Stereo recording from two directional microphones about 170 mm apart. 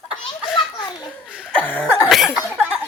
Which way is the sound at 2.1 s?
Centre (ahead or behind).